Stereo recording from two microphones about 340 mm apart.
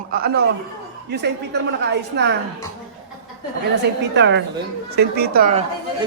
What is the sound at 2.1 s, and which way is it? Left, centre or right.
Speech, right.